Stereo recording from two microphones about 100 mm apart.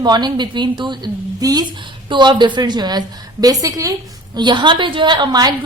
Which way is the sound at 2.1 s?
50° right (ahead or behind).